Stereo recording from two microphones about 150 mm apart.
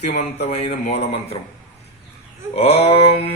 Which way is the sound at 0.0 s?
55° left (ahead or behind).